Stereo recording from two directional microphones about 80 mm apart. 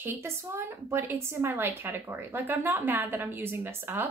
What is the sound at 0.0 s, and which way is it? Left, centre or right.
A woman's voice, right.